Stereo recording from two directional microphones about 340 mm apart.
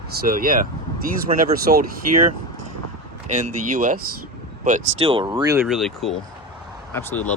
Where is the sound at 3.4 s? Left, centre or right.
Right.